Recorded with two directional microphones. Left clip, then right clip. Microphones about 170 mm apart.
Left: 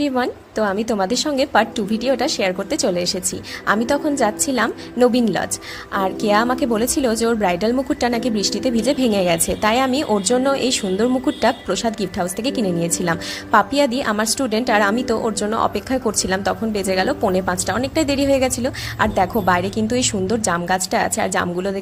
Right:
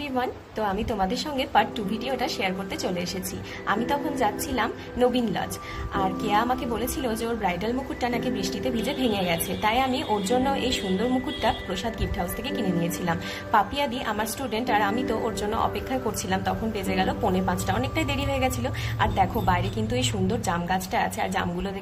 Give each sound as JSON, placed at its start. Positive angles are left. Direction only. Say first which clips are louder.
{"t": 0.0, "sound": "a woman's voice", "louder": "left 8 dB", "side_deg": 45}